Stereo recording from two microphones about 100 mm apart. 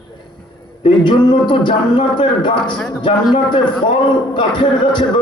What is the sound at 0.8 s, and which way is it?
Speech, 50° left (ahead or behind).